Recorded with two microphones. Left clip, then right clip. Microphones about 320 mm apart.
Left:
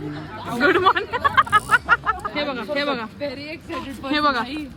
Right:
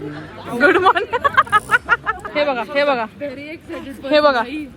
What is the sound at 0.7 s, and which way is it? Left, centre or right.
Speech, centre.